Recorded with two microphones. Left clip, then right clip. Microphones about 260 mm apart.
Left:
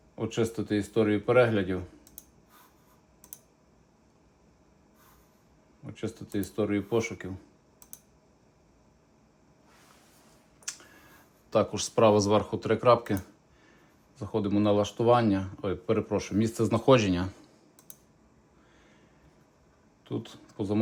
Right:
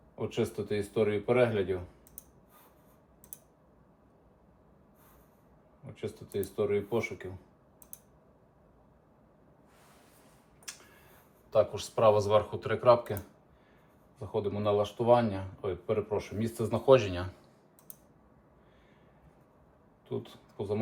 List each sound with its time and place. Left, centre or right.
0.2 s speech: left
6.0 s speech: left
11.5 s speech: left
14.2 s speech: left
20.1 s speech: left